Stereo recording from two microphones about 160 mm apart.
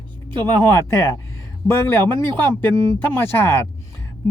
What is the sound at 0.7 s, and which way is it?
Speech, 15° left (ahead or behind).